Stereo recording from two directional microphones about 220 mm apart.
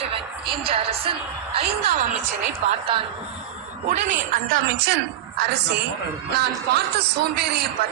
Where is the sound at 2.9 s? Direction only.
25° right (ahead or behind).